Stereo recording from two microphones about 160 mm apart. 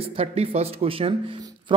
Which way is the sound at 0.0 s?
35° right (ahead or behind).